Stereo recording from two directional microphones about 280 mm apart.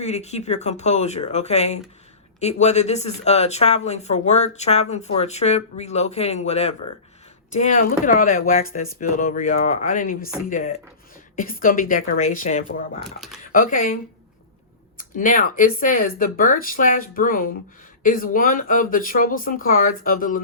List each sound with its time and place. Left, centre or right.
0.0 s speech: left
14.9 s speech: left